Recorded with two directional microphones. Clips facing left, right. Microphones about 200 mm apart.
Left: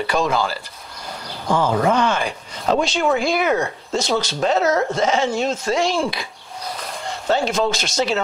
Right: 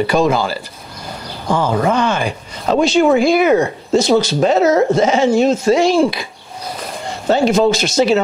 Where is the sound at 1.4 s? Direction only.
35° right (ahead or behind).